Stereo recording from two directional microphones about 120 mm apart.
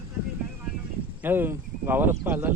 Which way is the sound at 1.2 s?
15° right (ahead or behind).